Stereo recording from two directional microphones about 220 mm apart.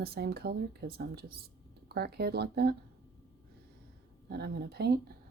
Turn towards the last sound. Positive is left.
turn(degrees=-45)  # may be behind; listen again after turning